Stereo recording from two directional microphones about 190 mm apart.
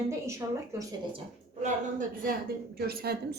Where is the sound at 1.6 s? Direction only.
45° right (ahead or behind).